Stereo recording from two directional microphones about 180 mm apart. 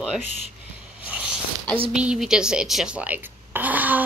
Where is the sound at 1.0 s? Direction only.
10° right (ahead or behind).